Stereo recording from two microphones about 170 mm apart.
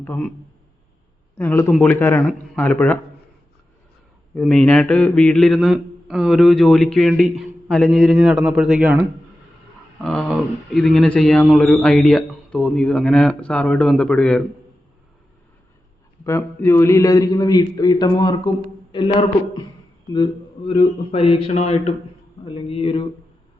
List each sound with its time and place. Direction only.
0.0 s speech: 10° left (ahead or behind)
1.4 s speech: 15° left (ahead or behind)
4.4 s a man's voice: 5° left (ahead or behind)
8.1 s a man's voice: 10° right (ahead or behind); by 14.4 s 5° left (ahead or behind)
16.2 s a man's voice: 15° left (ahead or behind)
20.1 s speech: 30° left (ahead or behind)